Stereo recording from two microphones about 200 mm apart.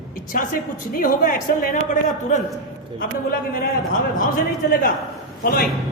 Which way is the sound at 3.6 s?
40° left (ahead or behind).